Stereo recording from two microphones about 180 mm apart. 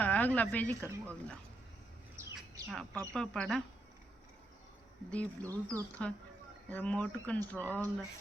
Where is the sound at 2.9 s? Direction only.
20° right (ahead or behind).